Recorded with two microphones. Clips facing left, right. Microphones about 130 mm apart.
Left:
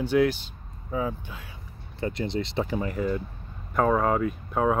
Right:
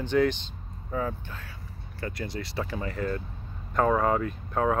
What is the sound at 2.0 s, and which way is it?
Speech, 25° left (ahead or behind).